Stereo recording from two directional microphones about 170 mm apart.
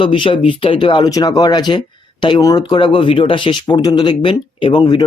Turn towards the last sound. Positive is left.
turn(degrees=25)  # may be behind; listen again after turning